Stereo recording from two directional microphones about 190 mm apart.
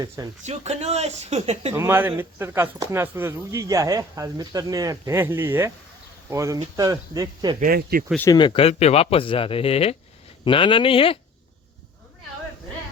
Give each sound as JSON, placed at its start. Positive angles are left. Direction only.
{"t": 0.4, "sound": "speech", "side_deg": -35}
{"t": 1.7, "sound": "speech", "side_deg": -10}
{"t": 7.6, "sound": "speech", "side_deg": -50}
{"t": 8.3, "sound": "speech", "side_deg": 25}